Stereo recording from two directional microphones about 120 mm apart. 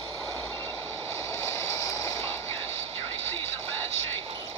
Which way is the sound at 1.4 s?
25° left (ahead or behind).